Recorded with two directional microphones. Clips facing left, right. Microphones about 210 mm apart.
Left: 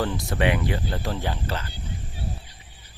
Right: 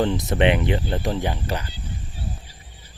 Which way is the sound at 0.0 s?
20° right (ahead or behind).